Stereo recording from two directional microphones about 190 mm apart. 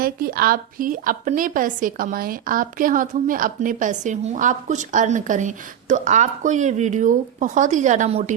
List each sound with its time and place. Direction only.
0.0 s a woman's voice: 50° right (ahead or behind)